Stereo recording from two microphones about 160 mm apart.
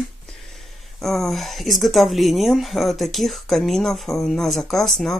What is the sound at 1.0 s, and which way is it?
Speech, centre (ahead or behind).